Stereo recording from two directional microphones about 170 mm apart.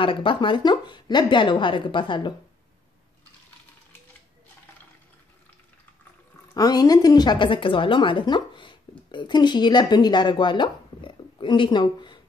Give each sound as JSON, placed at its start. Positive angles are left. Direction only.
{"t": 0.0, "sound": "a woman's voice", "side_deg": 30}
{"t": 6.5, "sound": "a woman's voice", "side_deg": 20}